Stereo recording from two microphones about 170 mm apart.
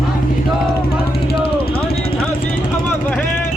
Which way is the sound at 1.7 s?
65° left (ahead or behind).